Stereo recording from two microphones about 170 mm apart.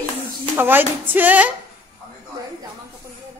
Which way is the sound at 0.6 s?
10° right (ahead or behind).